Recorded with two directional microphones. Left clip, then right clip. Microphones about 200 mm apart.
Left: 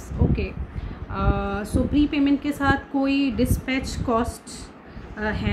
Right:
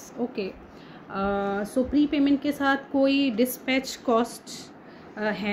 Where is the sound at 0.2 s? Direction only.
Centre (ahead or behind).